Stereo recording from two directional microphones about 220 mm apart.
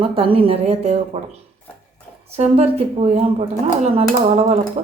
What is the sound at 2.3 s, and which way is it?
Speech, 25° right (ahead or behind).